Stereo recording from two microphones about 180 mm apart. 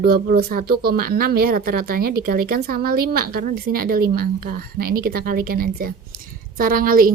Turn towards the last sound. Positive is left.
turn(degrees=-50)  # may be behind; listen again after turning